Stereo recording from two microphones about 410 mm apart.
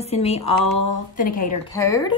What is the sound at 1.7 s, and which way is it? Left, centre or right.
Speech, centre.